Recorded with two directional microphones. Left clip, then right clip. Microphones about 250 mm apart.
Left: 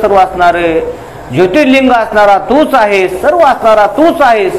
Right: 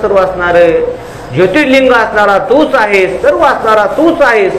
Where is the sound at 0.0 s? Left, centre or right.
Left.